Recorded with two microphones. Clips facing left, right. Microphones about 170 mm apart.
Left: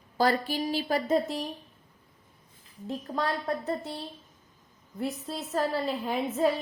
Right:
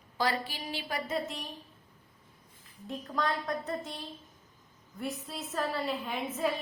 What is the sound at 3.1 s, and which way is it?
Speech, 35° left (ahead or behind).